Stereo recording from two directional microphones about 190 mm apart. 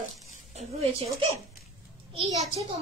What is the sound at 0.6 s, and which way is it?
Speech, 30° right (ahead or behind).